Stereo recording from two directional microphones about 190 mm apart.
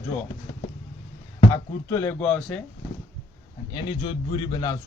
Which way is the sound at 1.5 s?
15° left (ahead or behind).